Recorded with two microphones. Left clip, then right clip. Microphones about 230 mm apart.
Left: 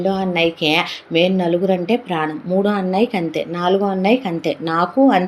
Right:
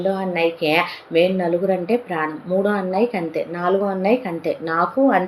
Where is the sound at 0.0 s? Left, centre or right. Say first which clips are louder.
Left 2 dB; left.